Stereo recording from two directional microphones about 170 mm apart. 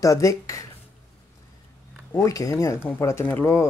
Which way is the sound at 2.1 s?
20° left (ahead or behind).